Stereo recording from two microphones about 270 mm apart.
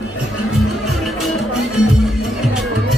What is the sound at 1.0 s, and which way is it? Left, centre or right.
Music, centre.